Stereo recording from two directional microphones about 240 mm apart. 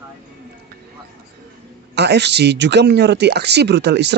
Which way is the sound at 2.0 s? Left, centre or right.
Right.